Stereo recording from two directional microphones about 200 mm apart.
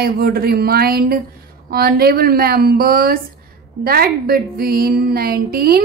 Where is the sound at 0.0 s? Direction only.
50° right (ahead or behind).